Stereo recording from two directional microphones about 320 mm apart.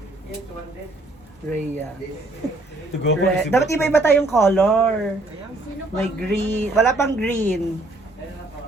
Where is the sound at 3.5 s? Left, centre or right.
Centre.